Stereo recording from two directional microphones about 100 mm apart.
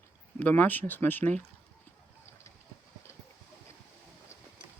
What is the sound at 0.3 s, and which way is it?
Speech, 15° left (ahead or behind).